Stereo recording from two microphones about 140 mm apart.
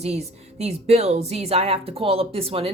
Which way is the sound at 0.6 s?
50° right (ahead or behind).